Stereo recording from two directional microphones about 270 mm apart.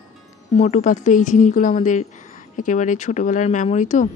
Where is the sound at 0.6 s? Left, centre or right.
Left.